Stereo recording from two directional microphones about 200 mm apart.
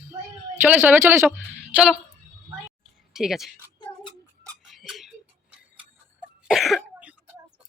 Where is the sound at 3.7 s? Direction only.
25° left (ahead or behind).